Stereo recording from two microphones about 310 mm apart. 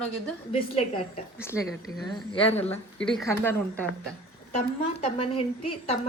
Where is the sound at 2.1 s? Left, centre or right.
Centre.